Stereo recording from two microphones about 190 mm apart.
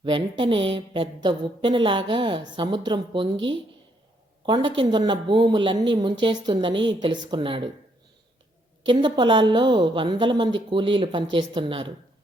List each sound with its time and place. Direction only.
0.0 s a woman's voice: 25° right (ahead or behind)
4.4 s a woman's voice: 25° right (ahead or behind)
8.9 s a woman's voice: 25° right (ahead or behind)